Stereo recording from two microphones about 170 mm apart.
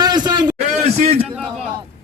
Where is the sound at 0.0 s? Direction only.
25° right (ahead or behind).